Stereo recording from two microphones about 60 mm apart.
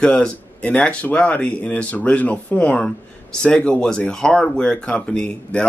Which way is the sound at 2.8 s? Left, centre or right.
Centre.